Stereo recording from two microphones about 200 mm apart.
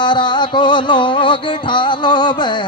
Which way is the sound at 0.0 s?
25° left (ahead or behind).